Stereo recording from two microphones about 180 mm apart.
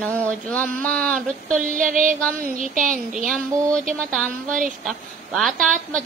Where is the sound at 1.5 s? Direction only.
45° right (ahead or behind).